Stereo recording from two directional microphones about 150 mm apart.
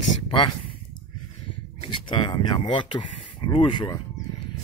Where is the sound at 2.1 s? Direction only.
30° left (ahead or behind).